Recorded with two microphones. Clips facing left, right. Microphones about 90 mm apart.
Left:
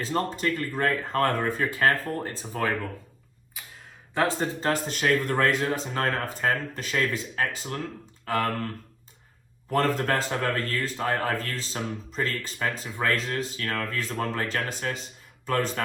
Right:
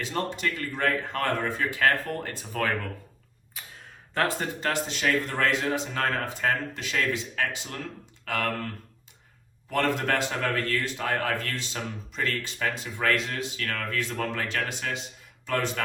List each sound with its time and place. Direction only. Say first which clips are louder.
0.0 s speech: left 2 dB; 40° left (ahead or behind)
3.6 s a sound: even; 5° left (ahead or behind)
4.1 s speech: left 2 dB; 20° left (ahead or behind)
4.6 s speech: left 1 dB; 45° left (ahead or behind)
9.6 s speech: left 1 dB; 40° left (ahead or behind)